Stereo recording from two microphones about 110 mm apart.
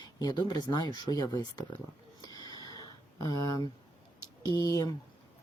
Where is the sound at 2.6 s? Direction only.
35° left (ahead or behind).